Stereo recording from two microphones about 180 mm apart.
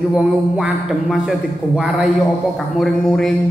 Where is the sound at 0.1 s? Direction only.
5° right (ahead or behind).